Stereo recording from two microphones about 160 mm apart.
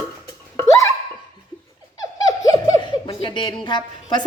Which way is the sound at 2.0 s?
20° left (ahead or behind).